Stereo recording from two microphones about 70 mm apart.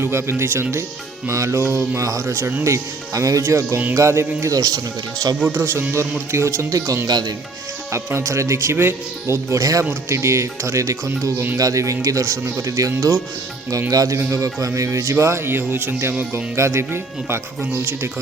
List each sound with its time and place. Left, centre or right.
0.0 s speech: right
1.6 s mantra: right
2.0 s speech: right
4.5 s speech: right
5.5 s speech: right
7.1 s speech: right
7.9 s speech: right
9.6 s speech: right
10.1 s speech: right
12.4 s speech: right
12.6 s speech: right
13.9 s speech: right
14.2 s speech: right